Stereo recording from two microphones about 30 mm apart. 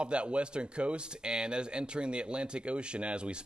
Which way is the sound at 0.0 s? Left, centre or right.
Right.